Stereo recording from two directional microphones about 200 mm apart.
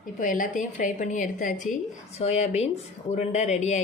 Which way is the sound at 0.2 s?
40° left (ahead or behind).